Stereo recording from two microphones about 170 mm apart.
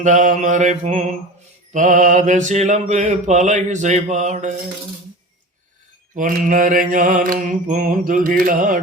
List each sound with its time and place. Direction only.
0.0 s mantra: 45° right (ahead or behind)
6.1 s mantra: 55° right (ahead or behind)